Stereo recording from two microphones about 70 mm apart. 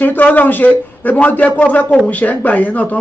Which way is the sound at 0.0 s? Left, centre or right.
Left.